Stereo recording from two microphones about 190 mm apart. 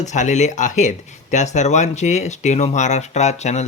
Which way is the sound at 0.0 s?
40° left (ahead or behind).